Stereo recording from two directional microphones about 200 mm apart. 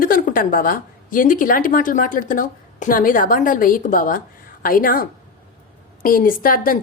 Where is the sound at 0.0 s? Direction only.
45° left (ahead or behind).